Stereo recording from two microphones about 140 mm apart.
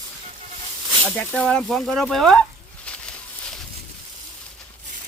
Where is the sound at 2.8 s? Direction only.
5° left (ahead or behind).